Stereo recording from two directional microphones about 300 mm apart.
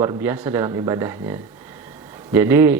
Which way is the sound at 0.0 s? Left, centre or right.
Centre.